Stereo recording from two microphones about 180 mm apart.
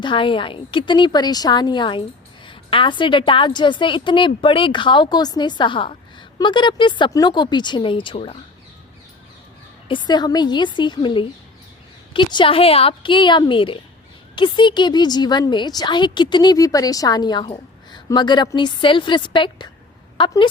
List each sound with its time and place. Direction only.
0.0 s speech: 25° left (ahead or behind)
9.9 s speech: 25° left (ahead or behind)